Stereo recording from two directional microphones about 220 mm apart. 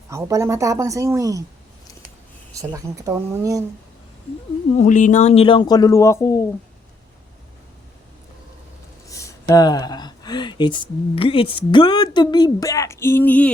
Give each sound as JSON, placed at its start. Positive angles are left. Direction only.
{"t": 0.1, "sound": "speech", "side_deg": -15}
{"t": 2.6, "sound": "speech", "side_deg": -15}
{"t": 4.8, "sound": "speech", "side_deg": 35}
{"t": 9.0, "sound": "speech", "side_deg": 15}